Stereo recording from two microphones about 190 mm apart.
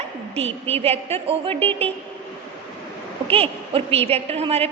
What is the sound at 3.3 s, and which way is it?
A woman's voice, 30° right (ahead or behind).